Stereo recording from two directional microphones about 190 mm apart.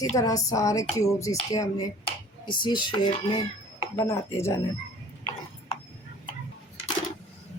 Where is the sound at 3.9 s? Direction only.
15° left (ahead or behind).